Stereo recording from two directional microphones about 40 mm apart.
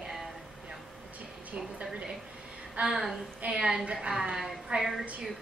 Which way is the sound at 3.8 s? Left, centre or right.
Right.